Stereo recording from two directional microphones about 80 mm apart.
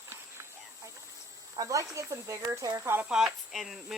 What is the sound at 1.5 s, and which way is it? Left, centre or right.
Speech, right.